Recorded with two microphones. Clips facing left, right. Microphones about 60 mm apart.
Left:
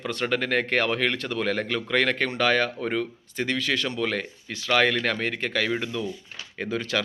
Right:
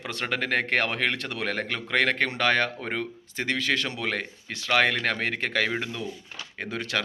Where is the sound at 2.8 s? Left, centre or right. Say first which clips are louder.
Left 4 dB; right.